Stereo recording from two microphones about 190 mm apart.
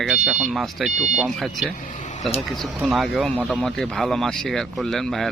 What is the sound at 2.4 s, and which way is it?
Speech, centre (ahead or behind).